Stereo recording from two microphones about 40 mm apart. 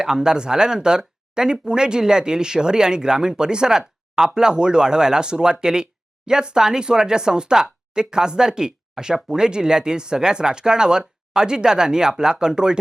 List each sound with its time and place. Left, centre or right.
0.0 s speech: centre